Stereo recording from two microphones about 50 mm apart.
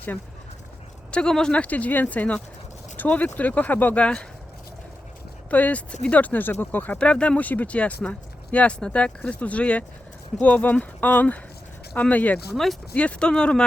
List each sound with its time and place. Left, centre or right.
1.1 s speech: centre
1.5 s speech: left
4.0 s speech: centre
5.5 s speech: left
7.0 s speech: left